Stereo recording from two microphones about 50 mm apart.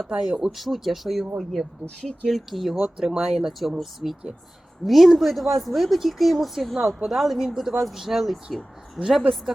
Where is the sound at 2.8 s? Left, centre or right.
Centre.